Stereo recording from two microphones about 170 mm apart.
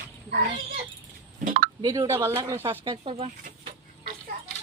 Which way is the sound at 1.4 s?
55° right (ahead or behind).